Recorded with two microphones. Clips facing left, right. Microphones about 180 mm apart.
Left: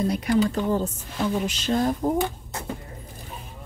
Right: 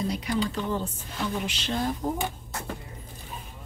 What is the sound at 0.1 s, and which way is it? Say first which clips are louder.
A woman's voice: left 6 dB; 50° left (ahead or behind).